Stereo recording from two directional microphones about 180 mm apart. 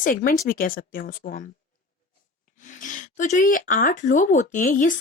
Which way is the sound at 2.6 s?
45° left (ahead or behind).